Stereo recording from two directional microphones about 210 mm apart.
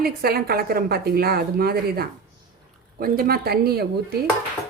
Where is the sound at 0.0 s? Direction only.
45° right (ahead or behind).